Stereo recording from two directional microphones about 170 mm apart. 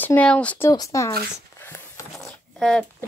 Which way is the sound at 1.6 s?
15° left (ahead or behind).